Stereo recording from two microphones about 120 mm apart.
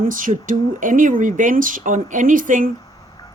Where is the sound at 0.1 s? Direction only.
90° right.